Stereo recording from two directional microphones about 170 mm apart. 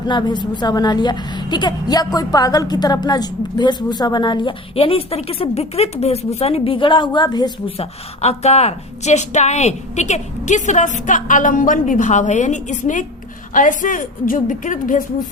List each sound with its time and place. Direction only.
0.1 s a woman's voice: 25° left (ahead or behind)
8.2 s speech: 40° left (ahead or behind)